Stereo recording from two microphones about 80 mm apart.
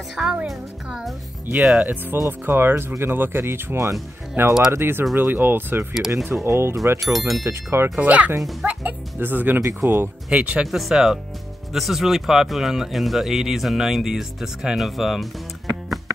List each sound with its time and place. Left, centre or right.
0.1 s speech: centre
2.2 s speech: right
5.9 s speech: centre
6.4 s speech: right
7.0 s speech: centre
7.4 s speech: right
8.0 s speech: centre
10.3 s speech: centre
10.7 s speech: centre